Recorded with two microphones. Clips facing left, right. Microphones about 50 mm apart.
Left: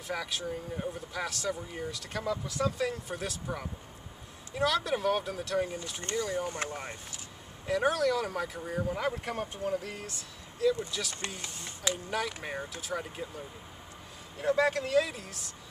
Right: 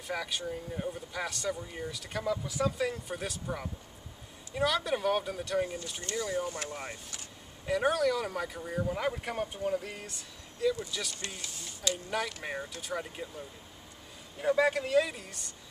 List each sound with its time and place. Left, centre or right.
0.1 s speech: centre
6.5 s speech: left
7.6 s speech: centre
11.2 s speech: left
12.4 s speech: centre
14.4 s speech: centre